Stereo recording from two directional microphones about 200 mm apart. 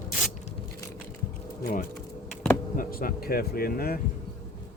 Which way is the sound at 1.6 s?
45° left (ahead or behind).